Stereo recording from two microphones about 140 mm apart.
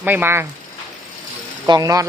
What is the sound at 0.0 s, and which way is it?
Speech, 15° right (ahead or behind).